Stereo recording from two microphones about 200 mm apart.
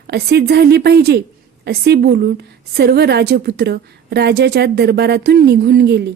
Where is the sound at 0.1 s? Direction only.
55° right (ahead or behind).